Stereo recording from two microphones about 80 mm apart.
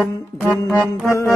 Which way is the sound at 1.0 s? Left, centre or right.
Left.